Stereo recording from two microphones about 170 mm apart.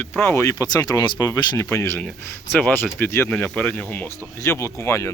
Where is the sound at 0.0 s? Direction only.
15° left (ahead or behind).